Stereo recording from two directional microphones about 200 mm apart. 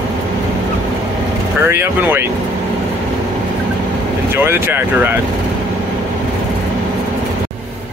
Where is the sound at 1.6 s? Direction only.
10° right (ahead or behind).